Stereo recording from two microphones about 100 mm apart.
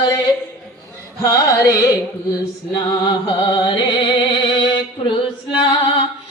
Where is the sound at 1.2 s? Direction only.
35° left (ahead or behind).